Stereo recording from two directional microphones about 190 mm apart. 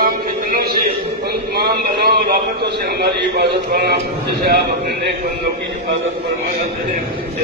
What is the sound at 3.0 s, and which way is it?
Speech, 60° right (ahead or behind).